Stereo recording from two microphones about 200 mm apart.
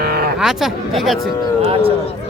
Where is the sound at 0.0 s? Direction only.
50° right (ahead or behind).